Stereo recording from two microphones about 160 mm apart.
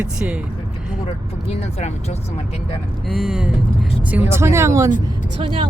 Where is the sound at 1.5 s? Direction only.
40° left (ahead or behind).